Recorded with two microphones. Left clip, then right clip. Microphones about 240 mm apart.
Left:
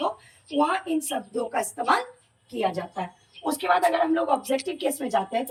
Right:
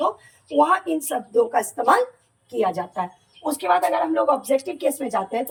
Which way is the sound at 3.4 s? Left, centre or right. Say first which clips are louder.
Right 2 dB; centre.